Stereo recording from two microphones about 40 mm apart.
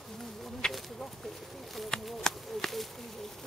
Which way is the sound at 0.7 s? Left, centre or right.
Centre.